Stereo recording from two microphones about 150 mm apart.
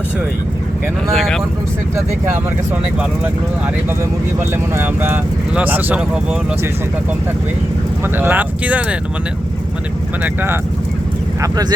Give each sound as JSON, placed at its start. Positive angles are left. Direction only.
{"t": 4.4, "sound": "speech", "side_deg": -15}
{"t": 8.1, "sound": "speech", "side_deg": -10}
{"t": 10.2, "sound": "speech", "side_deg": -15}